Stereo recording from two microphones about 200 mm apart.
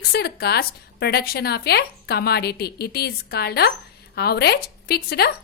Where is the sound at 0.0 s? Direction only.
55° left (ahead or behind).